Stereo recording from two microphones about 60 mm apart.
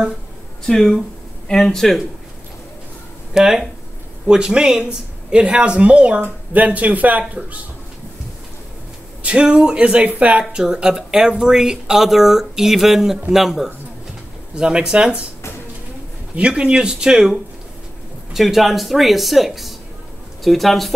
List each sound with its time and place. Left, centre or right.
0.7 s speech: centre
3.3 s speech: centre; by 7.2 s right
9.2 s speech: centre
10.5 s speech: centre
14.5 s speech: centre
16.3 s speech: centre
18.3 s speech: centre